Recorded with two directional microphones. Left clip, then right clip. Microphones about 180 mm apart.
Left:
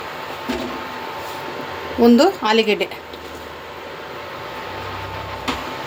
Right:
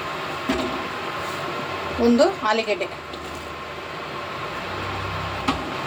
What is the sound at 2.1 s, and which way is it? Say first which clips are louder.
Speech: left 4 dB; 50° left (ahead or behind).